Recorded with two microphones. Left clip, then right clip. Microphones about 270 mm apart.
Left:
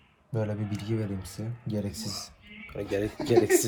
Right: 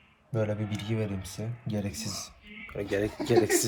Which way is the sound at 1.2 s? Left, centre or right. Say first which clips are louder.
Right 1 dB; right.